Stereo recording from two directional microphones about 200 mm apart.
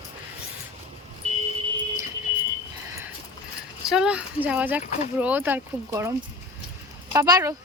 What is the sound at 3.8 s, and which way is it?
Speech, 5° right (ahead or behind).